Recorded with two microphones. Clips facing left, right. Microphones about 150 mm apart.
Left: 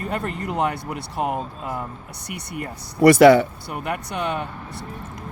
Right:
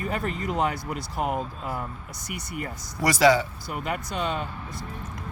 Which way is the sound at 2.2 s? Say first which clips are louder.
Left 2 dB; 65° left (ahead or behind).